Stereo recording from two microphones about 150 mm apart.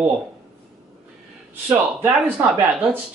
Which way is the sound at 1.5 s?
15° right (ahead or behind).